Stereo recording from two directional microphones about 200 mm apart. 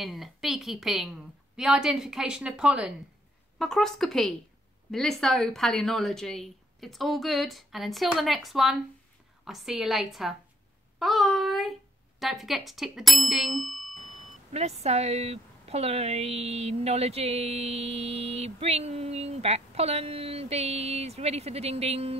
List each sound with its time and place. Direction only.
0.0 s a woman's voice: centre (ahead or behind)
14.0 s speech: 30° right (ahead or behind)